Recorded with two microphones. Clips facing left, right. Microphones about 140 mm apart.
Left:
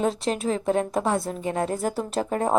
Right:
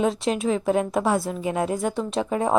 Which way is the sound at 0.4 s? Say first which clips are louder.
Right 1 dB; 35° left (ahead or behind).